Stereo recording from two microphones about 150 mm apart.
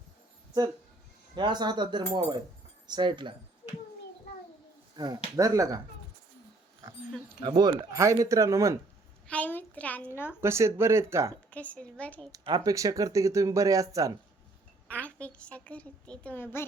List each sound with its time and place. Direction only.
1.4 s cutlery: 30° right (ahead or behind)
4.9 s speech: 25° right (ahead or behind)
6.8 s speech: 20° right (ahead or behind)
9.2 s a woman's voice: 10° left (ahead or behind)
10.4 s speech: 20° right (ahead or behind)
11.5 s a woman's voice: 10° left (ahead or behind)
12.3 s speech: 25° right (ahead or behind)
14.8 s a woman's voice: 10° left (ahead or behind)